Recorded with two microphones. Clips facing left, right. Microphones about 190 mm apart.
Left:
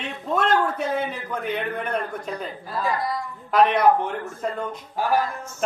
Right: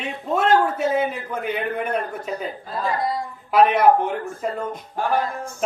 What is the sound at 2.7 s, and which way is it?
Speech, 25° right (ahead or behind).